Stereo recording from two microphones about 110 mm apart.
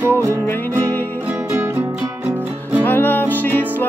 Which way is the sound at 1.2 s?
20° right (ahead or behind).